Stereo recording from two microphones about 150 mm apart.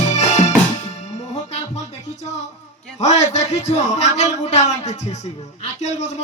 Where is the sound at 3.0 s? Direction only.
50° left (ahead or behind).